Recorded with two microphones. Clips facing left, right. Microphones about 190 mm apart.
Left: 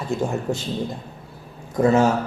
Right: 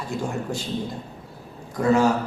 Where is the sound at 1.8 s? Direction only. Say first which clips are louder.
Left 3 dB; 20° left (ahead or behind).